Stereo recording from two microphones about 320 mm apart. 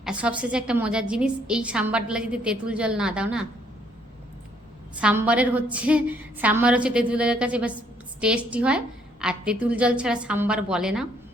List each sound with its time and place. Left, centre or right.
0.0 s a woman's voice: centre
4.9 s a woman's voice: centre